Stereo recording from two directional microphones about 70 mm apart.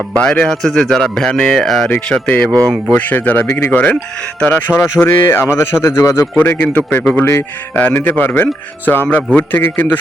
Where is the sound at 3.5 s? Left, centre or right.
Left.